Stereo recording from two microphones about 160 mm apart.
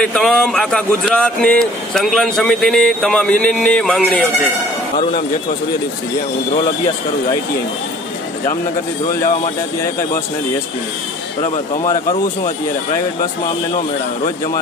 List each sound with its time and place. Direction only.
0.0 s speech: 5° left (ahead or behind)
11.8 s speech: 25° left (ahead or behind)